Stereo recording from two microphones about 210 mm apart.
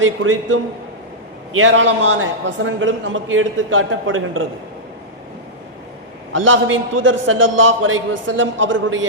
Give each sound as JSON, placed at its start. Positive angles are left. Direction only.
{"t": 0.0, "sound": "a man's voice", "side_deg": -70}
{"t": 6.3, "sound": "a man's voice", "side_deg": -70}